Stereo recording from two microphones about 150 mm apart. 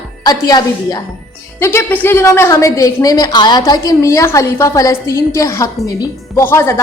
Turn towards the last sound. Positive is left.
turn(degrees=15)  # may be behind; listen again after turning